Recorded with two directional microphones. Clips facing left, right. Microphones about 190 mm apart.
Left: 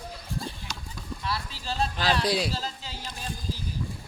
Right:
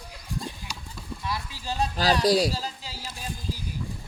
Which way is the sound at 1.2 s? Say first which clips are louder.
Right 1 dB; 15° right (ahead or behind).